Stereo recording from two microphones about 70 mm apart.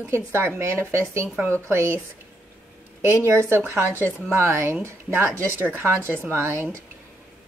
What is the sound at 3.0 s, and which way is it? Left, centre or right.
A woman's voice, right.